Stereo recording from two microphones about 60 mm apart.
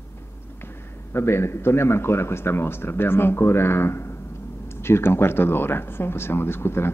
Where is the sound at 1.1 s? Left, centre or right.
Left.